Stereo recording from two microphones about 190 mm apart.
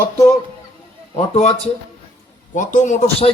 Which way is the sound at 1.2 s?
35° left (ahead or behind).